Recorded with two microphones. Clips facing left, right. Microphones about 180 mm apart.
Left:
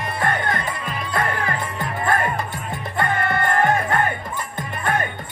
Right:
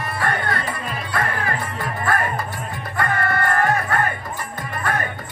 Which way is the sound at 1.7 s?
20° left (ahead or behind).